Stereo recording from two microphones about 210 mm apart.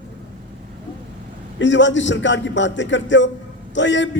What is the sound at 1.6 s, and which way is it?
A man's voice, 60° left (ahead or behind).